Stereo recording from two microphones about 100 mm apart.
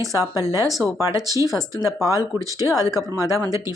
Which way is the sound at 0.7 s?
Centre (ahead or behind).